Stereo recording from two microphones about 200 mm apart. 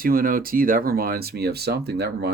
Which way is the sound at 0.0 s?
45° right (ahead or behind).